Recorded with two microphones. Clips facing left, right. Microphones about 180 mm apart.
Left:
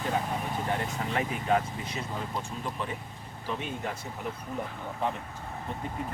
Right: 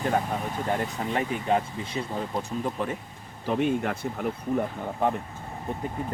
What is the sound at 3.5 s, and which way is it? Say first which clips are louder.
Speech: right 9 dB; 60° right (ahead or behind).